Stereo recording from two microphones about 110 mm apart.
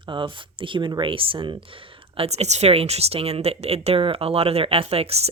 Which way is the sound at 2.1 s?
70° right (ahead or behind).